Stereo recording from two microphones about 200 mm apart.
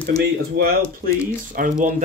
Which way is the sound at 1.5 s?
45° right (ahead or behind).